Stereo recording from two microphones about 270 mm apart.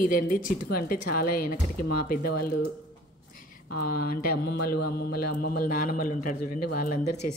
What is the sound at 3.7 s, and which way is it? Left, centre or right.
A man's voice, left.